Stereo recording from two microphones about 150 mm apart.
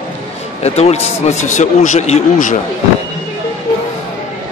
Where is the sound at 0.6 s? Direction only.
45° left (ahead or behind).